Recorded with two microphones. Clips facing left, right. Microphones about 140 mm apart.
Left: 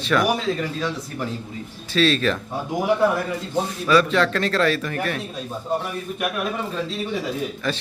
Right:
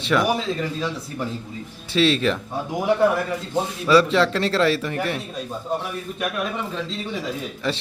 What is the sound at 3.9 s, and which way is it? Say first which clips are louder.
Speech: right 2 dB; 25° right (ahead or behind).